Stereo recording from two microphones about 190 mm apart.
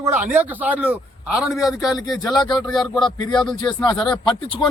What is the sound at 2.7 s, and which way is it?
Speech, centre (ahead or behind).